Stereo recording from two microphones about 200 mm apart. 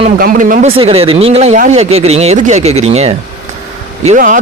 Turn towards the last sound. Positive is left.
turn(degrees=-40)  # may be behind; listen again after turning